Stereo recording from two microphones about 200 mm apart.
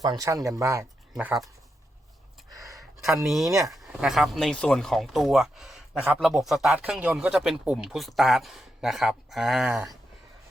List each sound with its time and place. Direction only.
0.2 s speech: 15° right (ahead or behind)
2.5 s a sound: centre (ahead or behind)
3.2 s speech: centre (ahead or behind)